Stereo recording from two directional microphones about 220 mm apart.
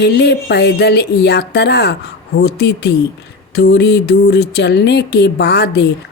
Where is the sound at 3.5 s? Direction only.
50° left (ahead or behind).